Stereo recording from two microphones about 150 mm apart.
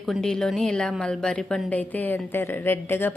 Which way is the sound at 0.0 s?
5° left (ahead or behind).